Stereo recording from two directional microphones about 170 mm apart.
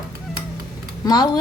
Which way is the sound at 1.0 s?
25° left (ahead or behind).